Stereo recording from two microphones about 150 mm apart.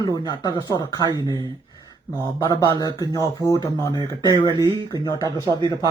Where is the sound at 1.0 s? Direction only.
25° right (ahead or behind).